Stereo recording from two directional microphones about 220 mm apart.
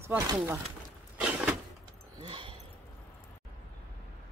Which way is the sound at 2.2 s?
20° right (ahead or behind).